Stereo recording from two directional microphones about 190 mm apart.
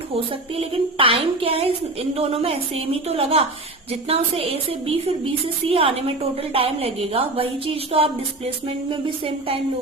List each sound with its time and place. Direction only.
0.5 s a woman's voice: 30° right (ahead or behind)